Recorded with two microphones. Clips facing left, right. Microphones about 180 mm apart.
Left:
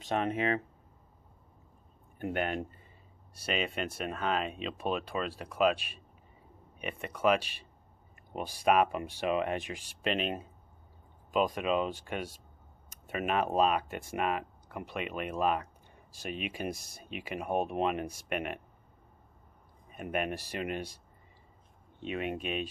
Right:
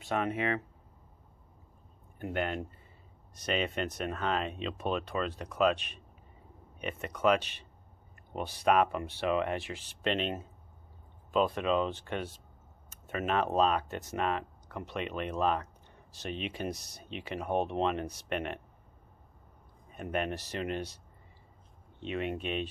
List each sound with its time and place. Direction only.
0.1 s speech: 25° left (ahead or behind)
2.1 s speech: 20° left (ahead or behind)
11.3 s speech: 10° left (ahead or behind)
19.9 s speech: 10° left (ahead or behind)
22.0 s speech: 15° left (ahead or behind)